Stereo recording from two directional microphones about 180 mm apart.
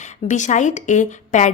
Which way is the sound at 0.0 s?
40° left (ahead or behind).